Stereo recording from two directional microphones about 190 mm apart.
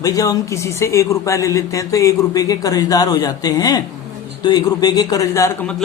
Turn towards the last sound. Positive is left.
turn(degrees=15)  # may be behind; listen again after turning